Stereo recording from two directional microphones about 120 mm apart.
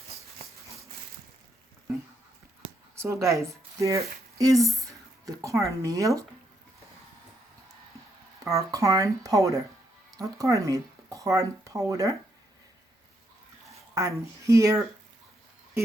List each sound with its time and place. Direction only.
3.0 s speech: 25° right (ahead or behind)
8.4 s speech: 25° right (ahead or behind)
13.9 s speech: 25° right (ahead or behind)